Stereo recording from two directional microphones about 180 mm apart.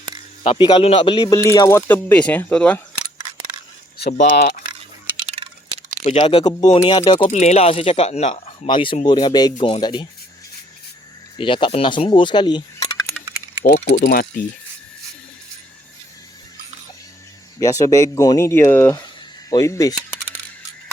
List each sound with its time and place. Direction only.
0.4 s speech: 25° left (ahead or behind); by 2.8 s 5° left (ahead or behind)
5.3 s a sound: 35° right (ahead or behind)
6.0 s speech: 35° left (ahead or behind)
11.3 s speech: 30° left (ahead or behind)
13.7 s speech: 45° left (ahead or behind)
14.0 s speech: 55° left (ahead or behind)
17.6 s speech: 20° left (ahead or behind)
18.9 s a sound: 20° left (ahead or behind)